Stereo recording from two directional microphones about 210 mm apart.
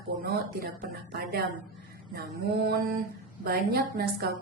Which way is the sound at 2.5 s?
45° right (ahead or behind).